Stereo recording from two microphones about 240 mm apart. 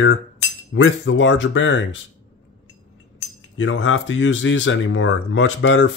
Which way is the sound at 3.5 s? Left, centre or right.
Left.